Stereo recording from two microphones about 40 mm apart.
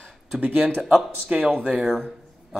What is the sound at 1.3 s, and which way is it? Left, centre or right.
Speech, right.